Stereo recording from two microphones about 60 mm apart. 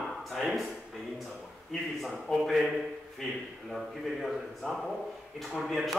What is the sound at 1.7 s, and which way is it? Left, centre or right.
Speech, centre.